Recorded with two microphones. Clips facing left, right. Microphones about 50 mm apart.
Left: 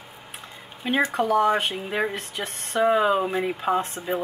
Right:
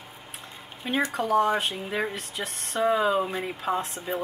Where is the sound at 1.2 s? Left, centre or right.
Left.